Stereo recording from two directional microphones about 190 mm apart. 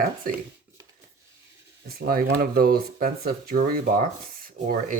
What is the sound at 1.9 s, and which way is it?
Speech, 50° right (ahead or behind).